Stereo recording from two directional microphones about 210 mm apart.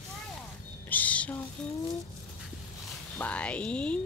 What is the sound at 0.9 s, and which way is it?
Music, 5° left (ahead or behind).